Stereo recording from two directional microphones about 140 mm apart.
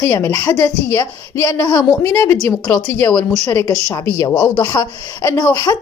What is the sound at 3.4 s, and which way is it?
A woman's voice, 25° left (ahead or behind).